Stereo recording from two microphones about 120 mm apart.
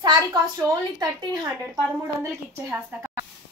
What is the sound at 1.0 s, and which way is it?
Speech, 35° right (ahead or behind).